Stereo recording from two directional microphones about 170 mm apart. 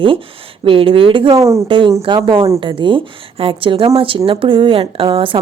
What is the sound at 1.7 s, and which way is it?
A woman's voice, 30° right (ahead or behind).